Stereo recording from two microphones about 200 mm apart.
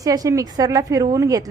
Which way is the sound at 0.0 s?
15° right (ahead or behind).